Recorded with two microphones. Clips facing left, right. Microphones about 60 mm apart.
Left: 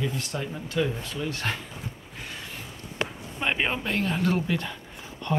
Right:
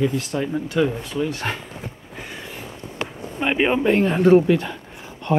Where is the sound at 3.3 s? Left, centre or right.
Centre.